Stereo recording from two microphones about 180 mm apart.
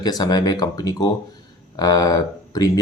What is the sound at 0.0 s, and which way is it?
Speech, 20° left (ahead or behind).